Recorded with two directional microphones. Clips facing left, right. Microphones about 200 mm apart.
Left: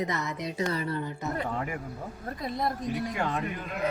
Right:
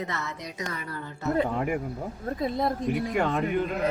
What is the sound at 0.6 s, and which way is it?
Speech, 30° left (ahead or behind).